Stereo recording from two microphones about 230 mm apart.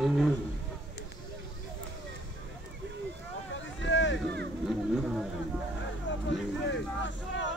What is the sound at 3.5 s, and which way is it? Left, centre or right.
Vehicle, left.